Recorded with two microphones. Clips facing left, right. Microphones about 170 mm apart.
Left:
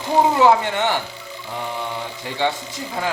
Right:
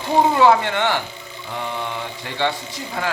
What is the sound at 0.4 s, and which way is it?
Speech, 15° left (ahead or behind).